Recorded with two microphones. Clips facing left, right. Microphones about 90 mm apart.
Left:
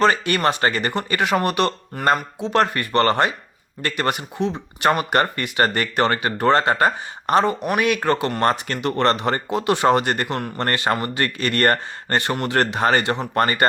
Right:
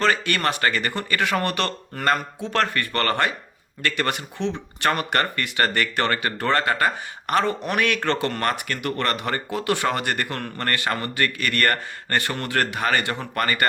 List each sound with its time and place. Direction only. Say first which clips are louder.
0.0 s speech: left 4 dB; 20° left (ahead or behind)
8.4 s speech: left 5 dB; 30° left (ahead or behind)